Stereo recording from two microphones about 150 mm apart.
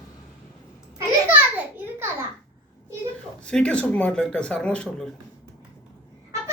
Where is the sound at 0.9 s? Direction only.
10° right (ahead or behind).